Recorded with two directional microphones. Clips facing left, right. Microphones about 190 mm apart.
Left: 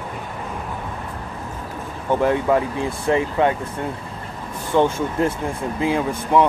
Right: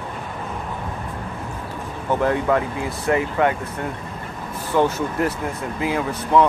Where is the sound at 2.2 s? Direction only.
20° left (ahead or behind).